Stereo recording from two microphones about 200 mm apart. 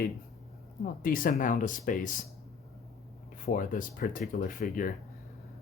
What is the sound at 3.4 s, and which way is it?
Speech, 45° left (ahead or behind).